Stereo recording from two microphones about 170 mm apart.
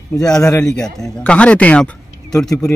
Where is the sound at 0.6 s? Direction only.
5° left (ahead or behind).